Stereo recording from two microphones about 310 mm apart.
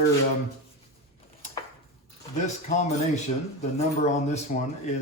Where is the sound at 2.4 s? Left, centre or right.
Left.